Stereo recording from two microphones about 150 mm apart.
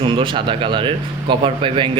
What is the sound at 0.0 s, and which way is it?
A man's voice, 35° right (ahead or behind).